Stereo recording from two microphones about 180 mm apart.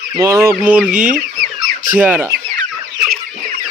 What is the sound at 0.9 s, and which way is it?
Fowl, 45° right (ahead or behind).